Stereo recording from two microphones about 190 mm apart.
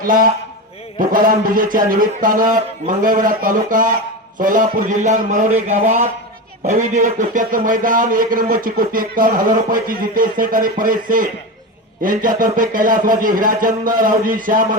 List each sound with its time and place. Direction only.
0.0 s speech: 45° right (ahead or behind)